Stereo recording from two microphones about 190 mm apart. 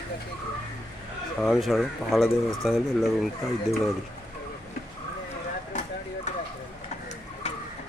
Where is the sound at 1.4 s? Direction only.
Centre (ahead or behind).